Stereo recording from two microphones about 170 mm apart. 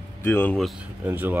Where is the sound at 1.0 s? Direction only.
10° right (ahead or behind).